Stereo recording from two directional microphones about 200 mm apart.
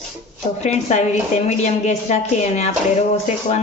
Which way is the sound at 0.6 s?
35° left (ahead or behind).